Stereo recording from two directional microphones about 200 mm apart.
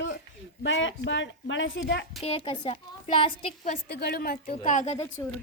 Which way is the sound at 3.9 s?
50° left (ahead or behind).